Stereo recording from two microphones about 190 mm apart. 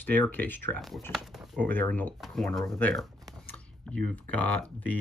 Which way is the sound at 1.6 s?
10° left (ahead or behind).